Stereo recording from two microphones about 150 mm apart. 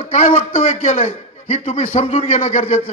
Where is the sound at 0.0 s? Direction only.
40° left (ahead or behind).